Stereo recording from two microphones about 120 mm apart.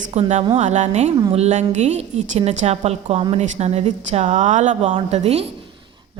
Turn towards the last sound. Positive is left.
turn(degrees=-60)  # may be behind; listen again after turning